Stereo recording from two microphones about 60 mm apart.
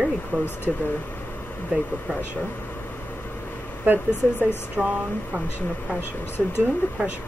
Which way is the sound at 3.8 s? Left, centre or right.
Right.